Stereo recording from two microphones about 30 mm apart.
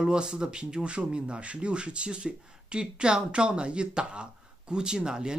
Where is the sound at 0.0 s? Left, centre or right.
Right.